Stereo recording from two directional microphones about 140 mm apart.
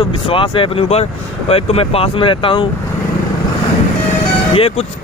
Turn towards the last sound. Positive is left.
turn(degrees=45)  # may be behind; listen again after turning